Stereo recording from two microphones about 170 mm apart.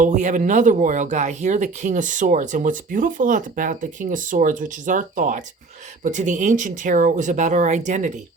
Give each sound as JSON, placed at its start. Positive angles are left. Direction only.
{"t": 0.0, "sound": "speech", "side_deg": -45}